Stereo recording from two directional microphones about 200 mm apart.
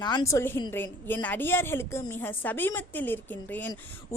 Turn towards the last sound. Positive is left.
turn(degrees=10)  # may be behind; listen again after turning